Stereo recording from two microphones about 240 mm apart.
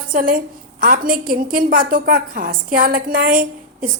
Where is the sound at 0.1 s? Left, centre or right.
Right.